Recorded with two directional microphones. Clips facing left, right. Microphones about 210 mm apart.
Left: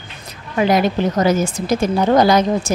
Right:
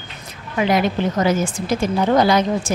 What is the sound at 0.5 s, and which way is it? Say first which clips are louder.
A woman's voice: left 2 dB; 40° left (ahead or behind).